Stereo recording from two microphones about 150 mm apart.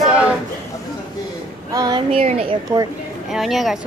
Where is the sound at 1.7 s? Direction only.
25° right (ahead or behind).